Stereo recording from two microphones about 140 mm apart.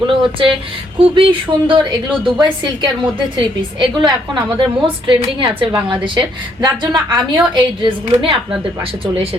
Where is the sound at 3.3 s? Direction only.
35° right (ahead or behind).